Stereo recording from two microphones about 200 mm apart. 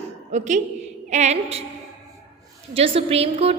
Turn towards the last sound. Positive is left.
turn(degrees=-30)  # may be behind; listen again after turning